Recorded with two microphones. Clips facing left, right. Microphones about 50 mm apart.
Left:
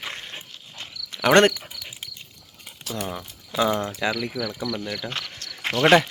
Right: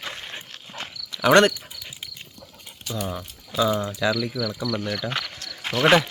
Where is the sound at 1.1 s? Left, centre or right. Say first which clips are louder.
Right 1 dB; left.